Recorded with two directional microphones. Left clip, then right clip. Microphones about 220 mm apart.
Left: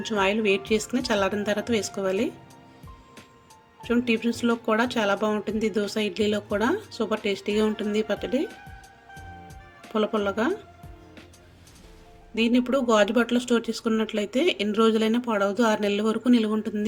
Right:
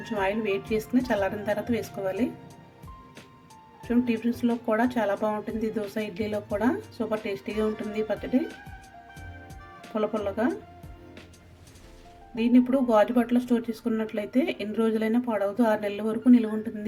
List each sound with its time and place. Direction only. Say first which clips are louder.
0.0 s speech: left 4 dB; 15° left (ahead or behind)
3.8 s speech: left 3 dB; 15° left (ahead or behind)
9.9 s speech: left 3 dB; 15° left (ahead or behind)
12.3 s speech: even; 15° left (ahead or behind)